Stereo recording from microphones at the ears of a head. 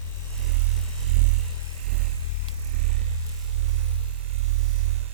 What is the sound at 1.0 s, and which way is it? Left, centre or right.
Music, right.